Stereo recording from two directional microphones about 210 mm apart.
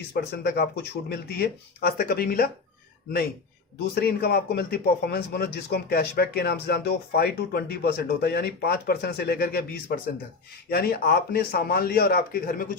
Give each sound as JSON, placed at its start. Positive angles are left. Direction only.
{"t": 0.1, "sound": "a man's voice", "side_deg": 50}
{"t": 4.0, "sound": "a man's voice", "side_deg": 50}
{"t": 10.7, "sound": "a man's voice", "side_deg": 45}